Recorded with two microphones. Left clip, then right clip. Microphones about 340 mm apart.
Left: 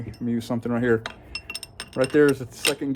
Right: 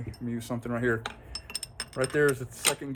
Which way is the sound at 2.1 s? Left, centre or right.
Left.